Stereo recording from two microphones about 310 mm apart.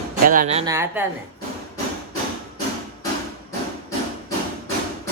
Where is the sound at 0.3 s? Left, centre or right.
Right.